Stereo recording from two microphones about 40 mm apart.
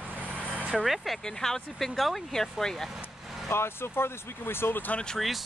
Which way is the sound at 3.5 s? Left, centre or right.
Left.